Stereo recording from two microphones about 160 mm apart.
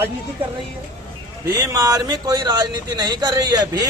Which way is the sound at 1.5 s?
20° right (ahead or behind).